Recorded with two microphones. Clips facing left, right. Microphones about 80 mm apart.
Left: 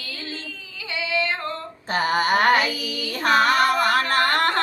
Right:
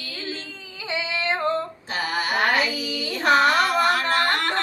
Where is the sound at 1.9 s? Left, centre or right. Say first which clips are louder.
Left 5 dB; left.